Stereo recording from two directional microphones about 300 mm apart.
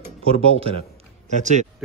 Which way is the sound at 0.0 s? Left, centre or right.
Centre.